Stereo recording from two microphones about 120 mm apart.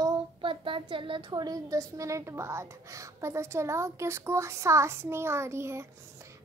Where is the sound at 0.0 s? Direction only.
45° right (ahead or behind).